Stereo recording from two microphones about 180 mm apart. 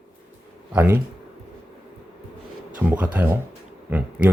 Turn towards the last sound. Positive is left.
turn(degrees=-10)  # may be behind; listen again after turning